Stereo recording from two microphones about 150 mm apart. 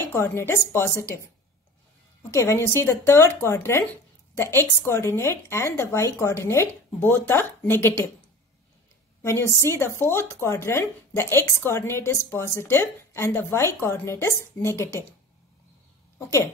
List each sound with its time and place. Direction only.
0.1 s speech: 15° left (ahead or behind)
2.3 s speech: 20° left (ahead or behind)
9.2 s speech: 20° left (ahead or behind)
16.2 s speech: 20° left (ahead or behind)